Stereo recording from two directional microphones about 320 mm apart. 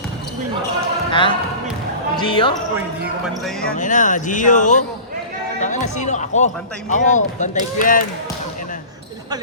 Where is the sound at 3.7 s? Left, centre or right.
Left.